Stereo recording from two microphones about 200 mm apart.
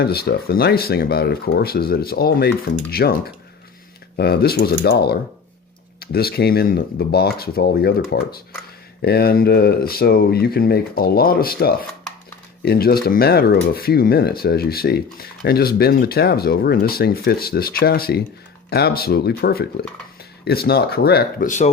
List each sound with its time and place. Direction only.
0.0 s speech: 50° left (ahead or behind)